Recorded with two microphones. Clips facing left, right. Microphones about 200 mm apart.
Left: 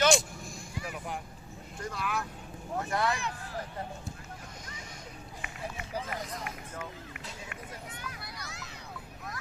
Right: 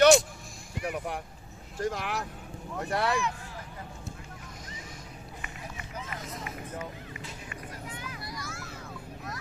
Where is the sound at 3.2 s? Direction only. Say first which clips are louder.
Right 4 dB; 35° left (ahead or behind).